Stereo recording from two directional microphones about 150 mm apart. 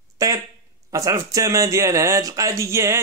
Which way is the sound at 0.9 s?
20° right (ahead or behind).